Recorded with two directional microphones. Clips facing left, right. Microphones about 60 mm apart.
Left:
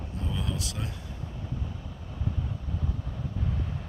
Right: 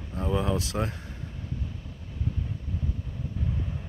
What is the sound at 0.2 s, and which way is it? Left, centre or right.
Speech, right.